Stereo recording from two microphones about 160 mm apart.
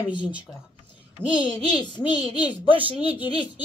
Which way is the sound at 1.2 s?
5° left (ahead or behind).